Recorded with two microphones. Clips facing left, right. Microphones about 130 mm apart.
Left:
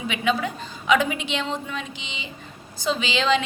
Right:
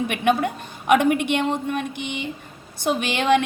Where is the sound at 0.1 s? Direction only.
55° right (ahead or behind).